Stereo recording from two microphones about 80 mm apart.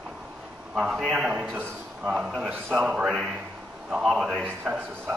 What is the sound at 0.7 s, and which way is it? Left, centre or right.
A man's voice, centre.